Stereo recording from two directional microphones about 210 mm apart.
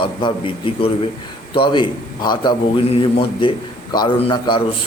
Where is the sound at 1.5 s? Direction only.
25° left (ahead or behind).